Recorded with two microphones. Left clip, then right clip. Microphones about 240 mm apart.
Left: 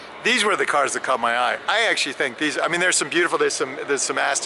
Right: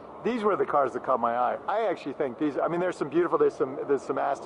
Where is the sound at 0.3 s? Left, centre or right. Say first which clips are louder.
Left 7 dB; centre.